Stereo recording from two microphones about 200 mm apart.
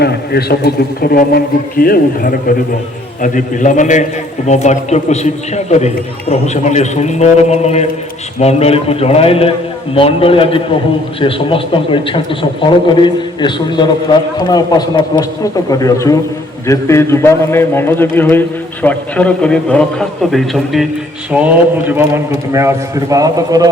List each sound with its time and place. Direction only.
0.0 s a man's voice: 55° left (ahead or behind); by 23.6 s 20° right (ahead or behind)